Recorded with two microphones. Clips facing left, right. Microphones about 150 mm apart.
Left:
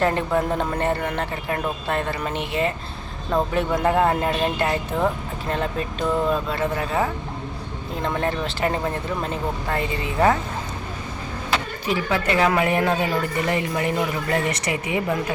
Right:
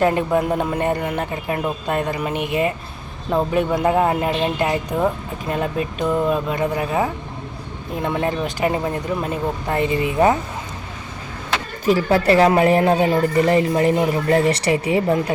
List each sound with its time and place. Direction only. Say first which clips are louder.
0.0 s speech: right 3 dB; 15° right (ahead or behind)
11.9 s speech: right 7 dB; 40° right (ahead or behind)